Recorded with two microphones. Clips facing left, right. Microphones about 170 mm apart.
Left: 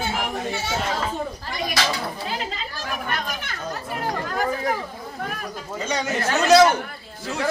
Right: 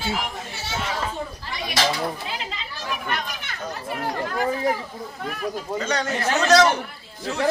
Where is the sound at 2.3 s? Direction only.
45° left (ahead or behind).